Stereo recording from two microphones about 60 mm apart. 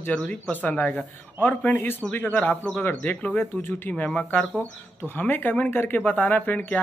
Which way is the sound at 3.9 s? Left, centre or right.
Centre.